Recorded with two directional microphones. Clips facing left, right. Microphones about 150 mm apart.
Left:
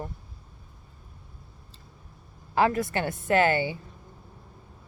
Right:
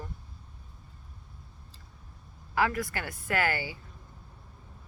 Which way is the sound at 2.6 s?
25° left (ahead or behind).